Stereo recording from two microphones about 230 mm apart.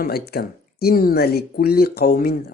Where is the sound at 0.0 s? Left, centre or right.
Left.